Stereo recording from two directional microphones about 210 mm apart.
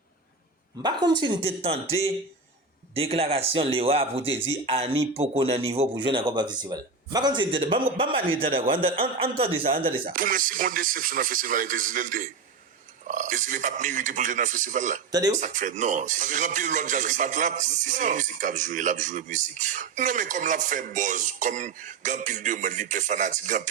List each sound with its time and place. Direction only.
0.8 s speech: 20° right (ahead or behind)
10.1 s speech: 40° right (ahead or behind)
15.1 s speech: 15° right (ahead or behind)
15.4 s speech: 35° right (ahead or behind)